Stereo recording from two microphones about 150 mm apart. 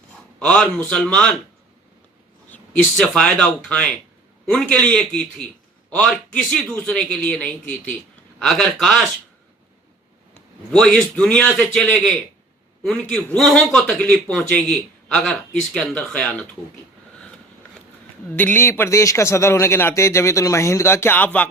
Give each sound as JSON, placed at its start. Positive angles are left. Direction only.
{"t": 0.3, "sound": "a man's voice", "side_deg": 5}
{"t": 2.5, "sound": "a man's voice", "side_deg": 5}
{"t": 10.7, "sound": "a man's voice", "side_deg": 5}
{"t": 18.3, "sound": "a man's voice", "side_deg": 10}